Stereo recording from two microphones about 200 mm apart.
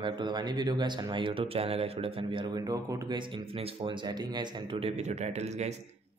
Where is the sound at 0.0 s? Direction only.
20° right (ahead or behind).